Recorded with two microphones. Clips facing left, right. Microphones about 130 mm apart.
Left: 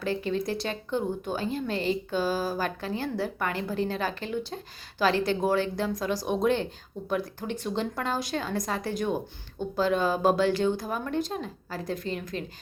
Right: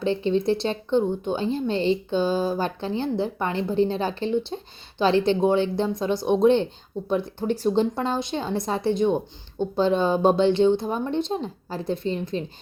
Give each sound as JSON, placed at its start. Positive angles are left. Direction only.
{"t": 0.0, "sound": "a woman's voice", "side_deg": -25}